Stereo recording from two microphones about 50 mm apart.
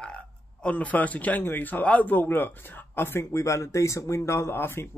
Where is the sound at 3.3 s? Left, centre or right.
Left.